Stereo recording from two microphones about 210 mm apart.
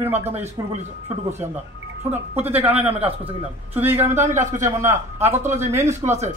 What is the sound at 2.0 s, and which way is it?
Speech, 10° right (ahead or behind).